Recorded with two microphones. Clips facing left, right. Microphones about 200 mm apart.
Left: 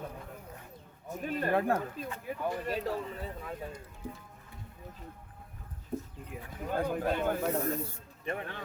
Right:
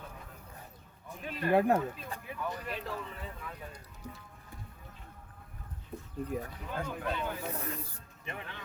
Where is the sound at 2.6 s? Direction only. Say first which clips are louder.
Left 6 dB; 40° left (ahead or behind).